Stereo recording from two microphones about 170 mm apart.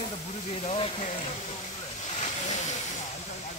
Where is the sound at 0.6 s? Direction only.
40° left (ahead or behind).